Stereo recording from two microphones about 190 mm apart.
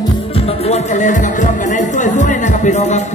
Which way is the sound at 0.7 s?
40° left (ahead or behind).